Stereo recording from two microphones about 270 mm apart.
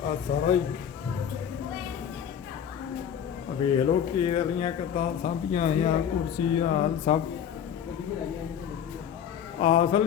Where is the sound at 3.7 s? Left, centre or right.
Left.